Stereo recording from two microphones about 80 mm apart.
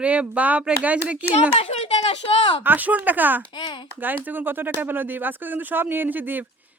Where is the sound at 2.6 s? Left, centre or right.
Right.